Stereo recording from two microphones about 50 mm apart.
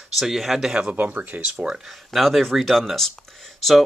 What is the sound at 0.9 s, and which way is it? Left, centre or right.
Speech, right.